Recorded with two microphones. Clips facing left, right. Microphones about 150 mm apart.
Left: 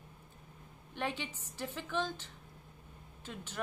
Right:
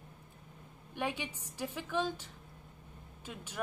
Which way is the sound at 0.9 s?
10° right (ahead or behind).